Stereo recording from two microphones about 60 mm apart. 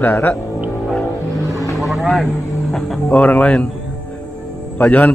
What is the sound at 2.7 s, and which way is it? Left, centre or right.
Speech, centre.